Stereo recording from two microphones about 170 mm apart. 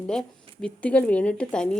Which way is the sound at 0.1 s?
5° left (ahead or behind).